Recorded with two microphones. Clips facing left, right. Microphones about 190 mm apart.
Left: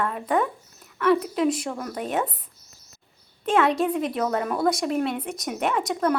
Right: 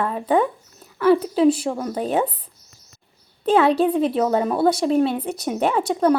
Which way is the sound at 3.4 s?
30° right (ahead or behind).